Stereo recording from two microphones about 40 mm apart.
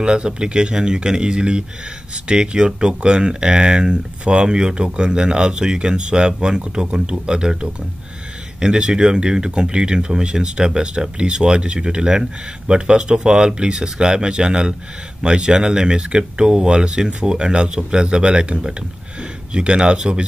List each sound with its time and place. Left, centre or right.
0.0 s speech: right